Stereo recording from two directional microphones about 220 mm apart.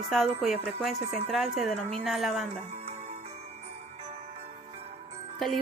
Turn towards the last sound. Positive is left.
turn(degrees=0)  # may be behind; listen again after turning